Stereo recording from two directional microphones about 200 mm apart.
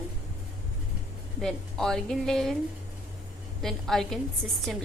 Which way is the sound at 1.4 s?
Centre (ahead or behind).